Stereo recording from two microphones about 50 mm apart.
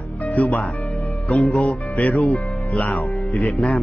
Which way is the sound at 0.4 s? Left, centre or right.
Left.